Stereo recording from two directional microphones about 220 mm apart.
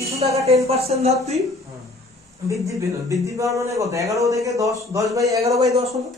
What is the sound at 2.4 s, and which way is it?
Speech, 15° right (ahead or behind).